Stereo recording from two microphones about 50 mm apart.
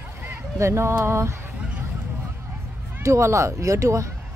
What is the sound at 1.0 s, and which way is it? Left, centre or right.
Fowl, right.